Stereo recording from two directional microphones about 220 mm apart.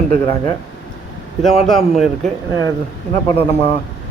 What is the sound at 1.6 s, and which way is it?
Speech, centre (ahead or behind).